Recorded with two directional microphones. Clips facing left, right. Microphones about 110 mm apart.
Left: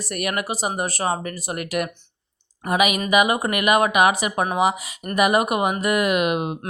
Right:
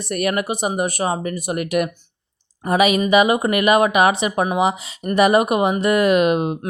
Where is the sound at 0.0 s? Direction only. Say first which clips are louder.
Right 5 dB; 25° right (ahead or behind).